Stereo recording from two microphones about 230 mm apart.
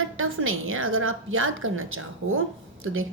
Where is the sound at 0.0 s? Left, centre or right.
Right.